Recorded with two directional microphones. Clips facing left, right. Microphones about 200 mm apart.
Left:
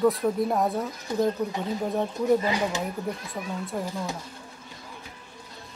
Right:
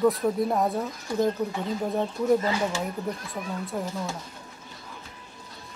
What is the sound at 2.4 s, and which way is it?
Speech, 15° left (ahead or behind).